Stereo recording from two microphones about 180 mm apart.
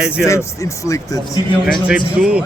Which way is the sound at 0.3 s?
15° left (ahead or behind).